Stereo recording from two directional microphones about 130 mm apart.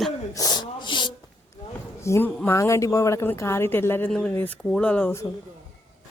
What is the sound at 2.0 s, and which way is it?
Speech, 20° left (ahead or behind).